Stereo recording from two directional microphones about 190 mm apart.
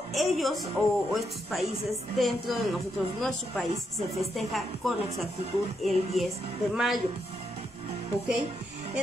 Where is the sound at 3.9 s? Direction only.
Centre (ahead or behind).